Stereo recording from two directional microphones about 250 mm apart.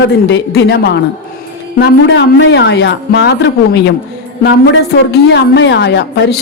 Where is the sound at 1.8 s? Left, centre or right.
Left.